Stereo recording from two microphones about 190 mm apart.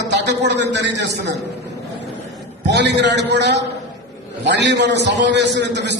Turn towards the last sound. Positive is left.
turn(degrees=-65)  # may be behind; listen again after turning